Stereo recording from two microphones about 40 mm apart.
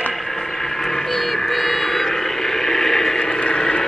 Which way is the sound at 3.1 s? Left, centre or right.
Centre.